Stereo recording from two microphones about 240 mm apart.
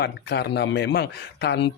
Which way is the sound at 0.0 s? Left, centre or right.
Left.